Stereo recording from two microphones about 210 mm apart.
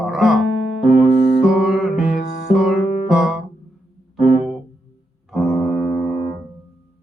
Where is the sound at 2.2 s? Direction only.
50° left (ahead or behind).